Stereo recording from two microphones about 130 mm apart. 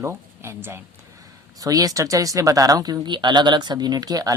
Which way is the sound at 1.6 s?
25° right (ahead or behind).